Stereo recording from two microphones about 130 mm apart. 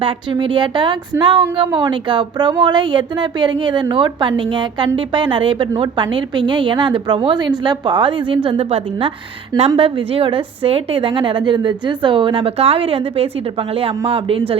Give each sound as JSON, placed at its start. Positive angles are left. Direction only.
{"t": 0.0, "sound": "a woman's voice", "side_deg": -40}